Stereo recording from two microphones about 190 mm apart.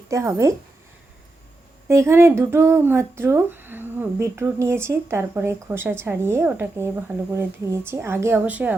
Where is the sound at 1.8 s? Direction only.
15° right (ahead or behind).